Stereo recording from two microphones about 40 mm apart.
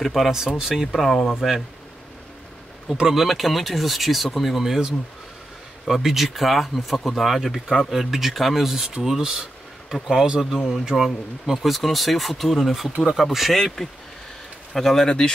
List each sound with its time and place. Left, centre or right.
0.0 s speech: centre
0.9 s speech: centre
3.0 s speech: centre
6.0 s speech: centre
9.0 s a sound: centre
9.9 s speech: centre
15.0 s speech: centre